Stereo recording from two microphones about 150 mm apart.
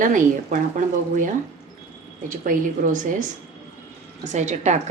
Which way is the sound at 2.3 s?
65° right (ahead or behind).